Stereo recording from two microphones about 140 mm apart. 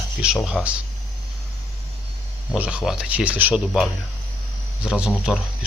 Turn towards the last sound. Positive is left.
turn(degrees=-5)  # may be behind; listen again after turning